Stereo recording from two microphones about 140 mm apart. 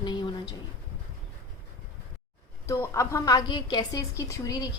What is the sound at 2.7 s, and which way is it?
A woman's voice, 20° left (ahead or behind).